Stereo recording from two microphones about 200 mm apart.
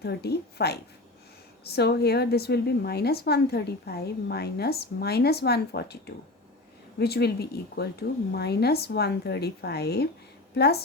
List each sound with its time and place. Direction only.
0.0 s a woman's voice: 55° left (ahead or behind)
7.0 s a woman's voice: 55° left (ahead or behind)